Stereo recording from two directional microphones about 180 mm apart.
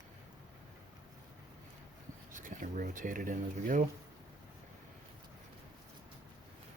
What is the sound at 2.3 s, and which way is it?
Speech, 45° right (ahead or behind).